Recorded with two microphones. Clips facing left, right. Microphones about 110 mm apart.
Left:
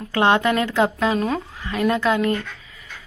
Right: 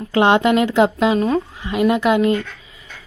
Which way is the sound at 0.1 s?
20° right (ahead or behind).